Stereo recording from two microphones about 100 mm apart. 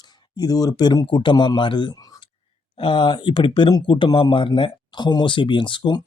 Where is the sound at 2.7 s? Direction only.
55° left (ahead or behind).